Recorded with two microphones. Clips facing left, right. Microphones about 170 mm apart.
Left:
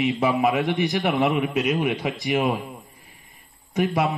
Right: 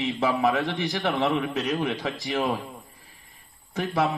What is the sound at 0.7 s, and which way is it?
A man's voice, 15° left (ahead or behind).